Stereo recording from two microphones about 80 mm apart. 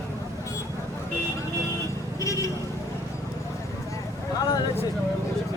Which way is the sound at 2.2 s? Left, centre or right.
Left.